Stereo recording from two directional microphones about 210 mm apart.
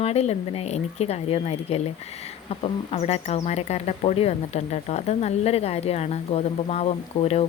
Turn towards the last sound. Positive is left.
turn(degrees=30)  # may be behind; listen again after turning